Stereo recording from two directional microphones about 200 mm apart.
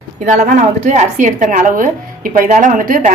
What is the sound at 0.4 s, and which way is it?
Speech, 40° right (ahead or behind).